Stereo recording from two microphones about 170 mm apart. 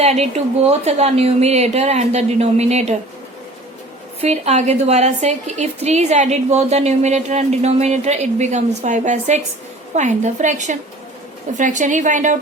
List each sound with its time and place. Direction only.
0.0 s a woman's voice: 40° right (ahead or behind)
4.2 s a woman's voice: 40° right (ahead or behind)